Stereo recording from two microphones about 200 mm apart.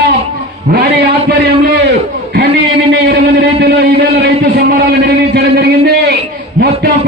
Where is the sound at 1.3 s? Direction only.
50° right (ahead or behind).